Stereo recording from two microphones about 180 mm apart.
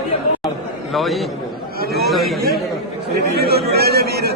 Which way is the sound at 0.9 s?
Centre (ahead or behind).